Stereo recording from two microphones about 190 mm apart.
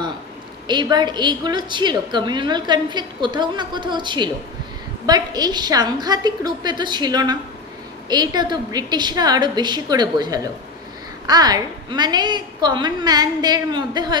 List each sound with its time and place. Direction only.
0.7 s a woman's voice: 20° right (ahead or behind)